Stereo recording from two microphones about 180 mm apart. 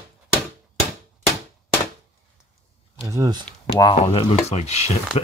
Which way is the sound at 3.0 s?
20° right (ahead or behind).